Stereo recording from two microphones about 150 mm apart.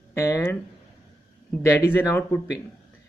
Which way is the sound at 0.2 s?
20° left (ahead or behind).